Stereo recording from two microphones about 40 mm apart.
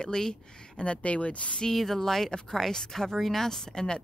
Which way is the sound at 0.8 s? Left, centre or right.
Left.